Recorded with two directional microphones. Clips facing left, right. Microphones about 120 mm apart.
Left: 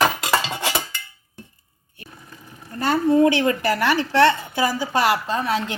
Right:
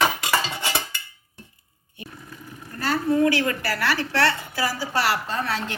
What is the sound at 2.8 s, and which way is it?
A woman's voice, 25° left (ahead or behind).